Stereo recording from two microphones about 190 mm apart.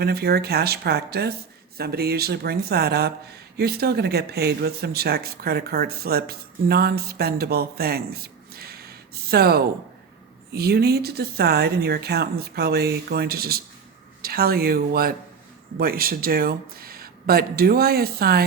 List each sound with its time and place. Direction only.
0.0 s speech: 55° right (ahead or behind)